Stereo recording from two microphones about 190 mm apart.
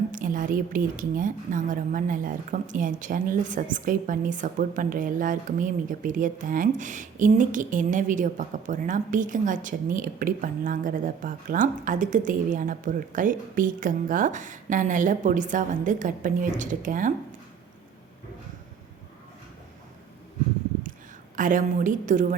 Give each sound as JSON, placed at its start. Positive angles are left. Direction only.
{"t": 0.1, "sound": "a woman's voice", "side_deg": -45}
{"t": 21.3, "sound": "a woman's voice", "side_deg": -45}